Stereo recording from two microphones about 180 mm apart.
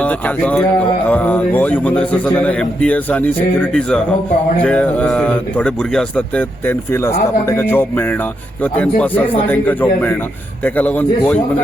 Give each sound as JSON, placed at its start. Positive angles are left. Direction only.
{"t": 0.0, "sound": "speech", "side_deg": 10}